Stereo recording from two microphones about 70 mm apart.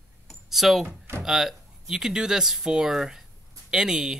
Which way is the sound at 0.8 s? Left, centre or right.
Right.